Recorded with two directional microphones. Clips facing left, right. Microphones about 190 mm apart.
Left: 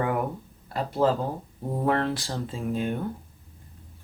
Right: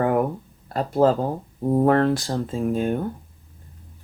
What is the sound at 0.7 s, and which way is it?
Speech, 45° right (ahead or behind).